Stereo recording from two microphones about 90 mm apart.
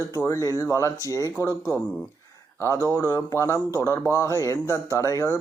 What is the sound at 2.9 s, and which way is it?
Speech, 35° left (ahead or behind).